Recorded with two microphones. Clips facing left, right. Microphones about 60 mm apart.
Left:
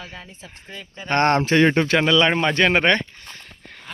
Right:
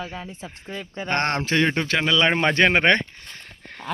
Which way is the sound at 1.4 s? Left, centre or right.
Centre.